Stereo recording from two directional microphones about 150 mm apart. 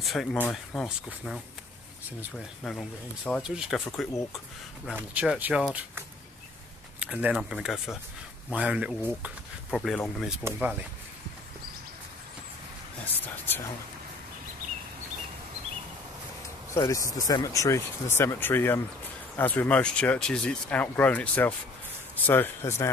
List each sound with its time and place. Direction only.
0.0 s speech: centre (ahead or behind)
0.4 s speech: 15° left (ahead or behind)
0.8 s speech: centre (ahead or behind)
2.6 s speech: 5° left (ahead or behind)
3.4 s speech: 5° right (ahead or behind)
10.4 s speech: 10° right (ahead or behind)
13.0 s speech: 10° left (ahead or behind)
16.7 s speech: 20° left (ahead or behind)